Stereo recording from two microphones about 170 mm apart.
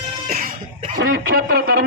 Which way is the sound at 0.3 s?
55° right (ahead or behind).